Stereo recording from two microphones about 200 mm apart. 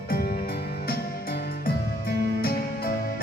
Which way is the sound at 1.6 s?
50° left (ahead or behind).